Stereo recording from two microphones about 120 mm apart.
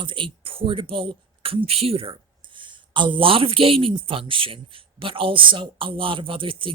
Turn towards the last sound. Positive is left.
turn(degrees=-45)  # may be behind; listen again after turning